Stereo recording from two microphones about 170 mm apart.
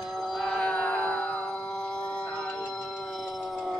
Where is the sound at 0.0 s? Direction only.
Centre (ahead or behind).